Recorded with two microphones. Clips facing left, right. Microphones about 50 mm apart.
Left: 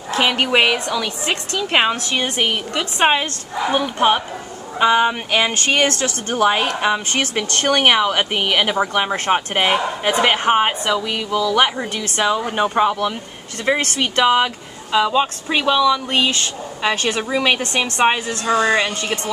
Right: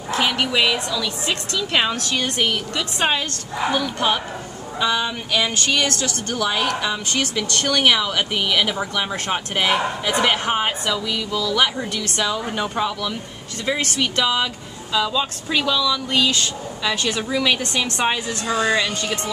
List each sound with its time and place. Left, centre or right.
0.1 s speech: left